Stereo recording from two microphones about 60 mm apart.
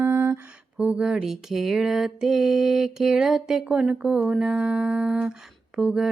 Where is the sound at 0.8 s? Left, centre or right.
Right.